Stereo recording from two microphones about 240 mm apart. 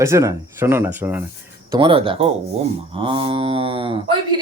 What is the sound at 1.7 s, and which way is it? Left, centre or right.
Speech, right.